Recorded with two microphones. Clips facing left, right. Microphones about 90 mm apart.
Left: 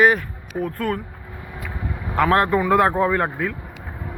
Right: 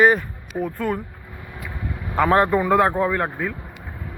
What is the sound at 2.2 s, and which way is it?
Speech, 5° right (ahead or behind).